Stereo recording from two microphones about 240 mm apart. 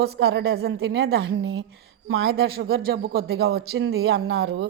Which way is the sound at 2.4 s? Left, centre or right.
Right.